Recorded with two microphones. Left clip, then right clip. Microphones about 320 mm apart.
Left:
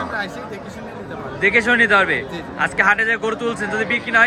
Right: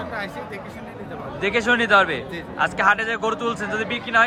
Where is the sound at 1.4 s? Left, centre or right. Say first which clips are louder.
Left 5 dB; centre.